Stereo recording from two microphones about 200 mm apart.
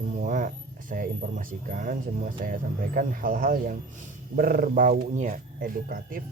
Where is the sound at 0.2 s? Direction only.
40° right (ahead or behind).